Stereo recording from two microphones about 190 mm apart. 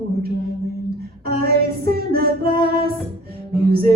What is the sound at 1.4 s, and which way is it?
Music, 50° right (ahead or behind).